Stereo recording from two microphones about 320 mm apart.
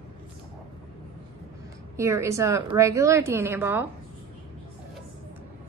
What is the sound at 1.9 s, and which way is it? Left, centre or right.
A woman's voice, centre.